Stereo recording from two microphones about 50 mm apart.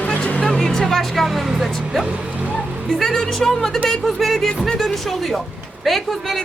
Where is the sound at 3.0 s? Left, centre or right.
Centre.